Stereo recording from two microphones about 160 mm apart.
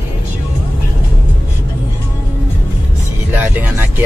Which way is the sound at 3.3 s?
10° right (ahead or behind).